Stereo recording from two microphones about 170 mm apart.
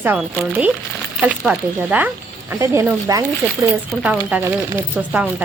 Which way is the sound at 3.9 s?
5° right (ahead or behind).